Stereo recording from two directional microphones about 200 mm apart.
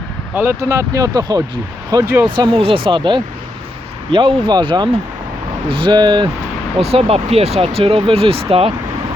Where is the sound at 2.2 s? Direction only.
25° right (ahead or behind).